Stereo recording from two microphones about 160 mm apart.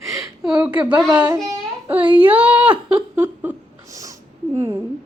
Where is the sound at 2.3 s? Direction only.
10° right (ahead or behind).